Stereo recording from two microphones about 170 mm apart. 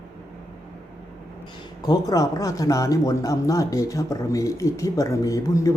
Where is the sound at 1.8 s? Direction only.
20° left (ahead or behind).